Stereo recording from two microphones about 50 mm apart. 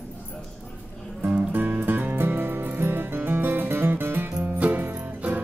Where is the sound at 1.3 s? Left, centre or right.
Right.